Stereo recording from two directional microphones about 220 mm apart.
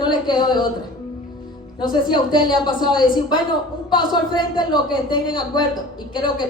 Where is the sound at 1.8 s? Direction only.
20° left (ahead or behind).